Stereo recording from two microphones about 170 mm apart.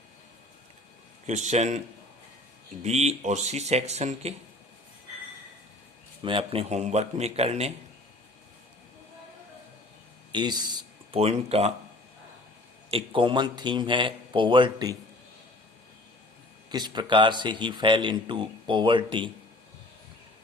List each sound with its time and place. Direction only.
1.3 s a man's voice: 45° right (ahead or behind)
2.8 s speech: 40° right (ahead or behind)
6.2 s speech: 35° right (ahead or behind)
10.3 s speech: 25° right (ahead or behind)
11.2 s speech: 35° right (ahead or behind)
12.9 s speech: 30° right (ahead or behind)
16.6 s speech: 25° right (ahead or behind)